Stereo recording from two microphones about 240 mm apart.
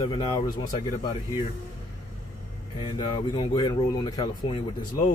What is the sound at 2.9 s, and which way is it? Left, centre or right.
Speech, centre.